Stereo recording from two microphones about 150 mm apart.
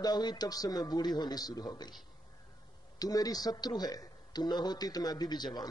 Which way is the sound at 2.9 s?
25° left (ahead or behind).